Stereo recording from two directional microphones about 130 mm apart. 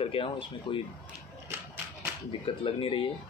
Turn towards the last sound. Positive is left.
turn(degrees=40)  # may be behind; listen again after turning